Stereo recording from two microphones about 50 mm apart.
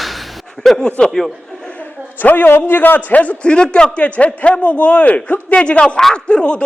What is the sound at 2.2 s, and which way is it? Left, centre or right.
A man's voice, left.